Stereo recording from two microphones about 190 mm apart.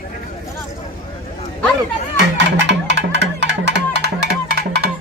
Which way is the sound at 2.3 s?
65° right (ahead or behind).